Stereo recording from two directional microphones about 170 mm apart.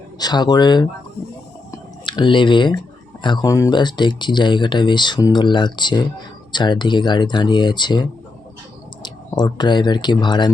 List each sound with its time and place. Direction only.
0.2 s speech: 25° left (ahead or behind)
1.7 s a sound: 25° left (ahead or behind)
3.2 s speech: 25° left (ahead or behind)
9.0 s speech: 25° left (ahead or behind)